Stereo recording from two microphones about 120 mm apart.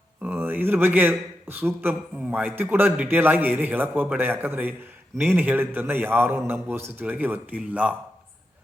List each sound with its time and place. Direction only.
0.2 s a man's voice: 15° right (ahead or behind)